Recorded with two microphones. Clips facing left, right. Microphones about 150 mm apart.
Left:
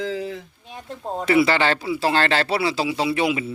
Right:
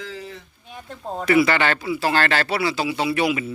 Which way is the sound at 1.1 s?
25° left (ahead or behind).